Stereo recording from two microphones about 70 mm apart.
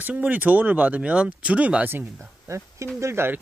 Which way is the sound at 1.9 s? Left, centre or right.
Right.